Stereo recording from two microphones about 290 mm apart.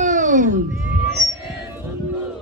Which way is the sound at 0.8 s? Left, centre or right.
Centre.